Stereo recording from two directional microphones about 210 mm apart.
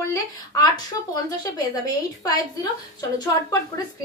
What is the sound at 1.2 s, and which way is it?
A woman's voice, 15° left (ahead or behind).